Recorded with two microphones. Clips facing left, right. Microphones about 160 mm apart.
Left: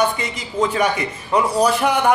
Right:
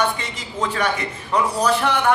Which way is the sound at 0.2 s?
10° left (ahead or behind).